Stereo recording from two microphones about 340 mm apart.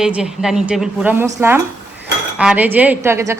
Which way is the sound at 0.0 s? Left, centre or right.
Centre.